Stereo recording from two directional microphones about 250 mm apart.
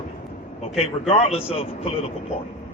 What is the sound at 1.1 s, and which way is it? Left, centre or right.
A man's voice, left.